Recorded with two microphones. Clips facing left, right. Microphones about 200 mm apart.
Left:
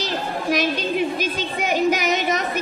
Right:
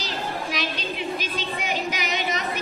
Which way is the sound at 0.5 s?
45° left (ahead or behind).